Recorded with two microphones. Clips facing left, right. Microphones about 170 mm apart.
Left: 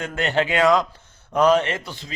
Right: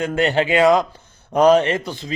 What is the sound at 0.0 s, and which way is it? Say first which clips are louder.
Speech: right 4 dB; 35° right (ahead or behind).